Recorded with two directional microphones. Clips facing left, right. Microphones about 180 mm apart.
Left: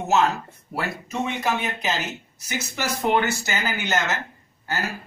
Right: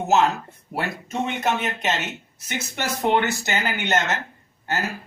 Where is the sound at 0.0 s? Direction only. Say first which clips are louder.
Right 1 dB; centre (ahead or behind).